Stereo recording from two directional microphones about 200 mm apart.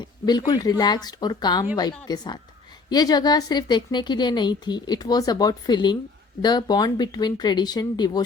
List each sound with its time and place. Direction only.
0.0 s a woman's voice: 20° left (ahead or behind)